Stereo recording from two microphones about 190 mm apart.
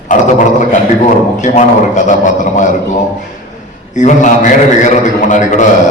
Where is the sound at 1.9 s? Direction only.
40° left (ahead or behind).